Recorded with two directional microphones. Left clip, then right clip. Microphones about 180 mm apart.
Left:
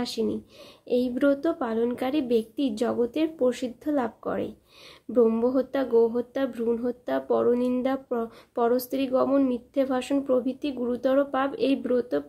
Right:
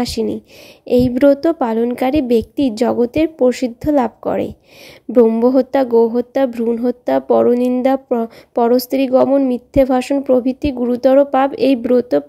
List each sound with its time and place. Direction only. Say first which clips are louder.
0.0 s a woman's voice: right 9 dB; 40° right (ahead or behind)
5.1 s a woman's voice: right 10 dB; 25° right (ahead or behind)
5.4 s a woman's voice: right 12 dB; 40° right (ahead or behind)